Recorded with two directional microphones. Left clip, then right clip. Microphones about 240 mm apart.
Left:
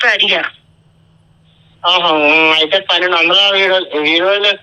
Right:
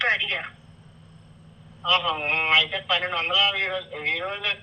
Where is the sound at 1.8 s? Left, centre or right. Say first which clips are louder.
Left 12 dB; left.